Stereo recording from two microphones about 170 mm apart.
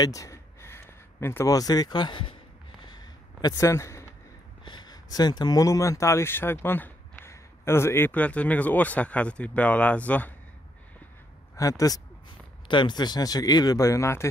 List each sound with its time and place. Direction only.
0.0 s speech: 20° left (ahead or behind)
2.8 s a sound: 25° left (ahead or behind)
4.6 s speech: 25° left (ahead or behind); by 10.3 s 10° left (ahead or behind)
11.5 s speech: 20° left (ahead or behind)